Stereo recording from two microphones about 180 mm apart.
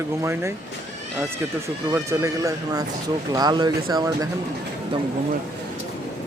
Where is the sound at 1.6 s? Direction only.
15° right (ahead or behind).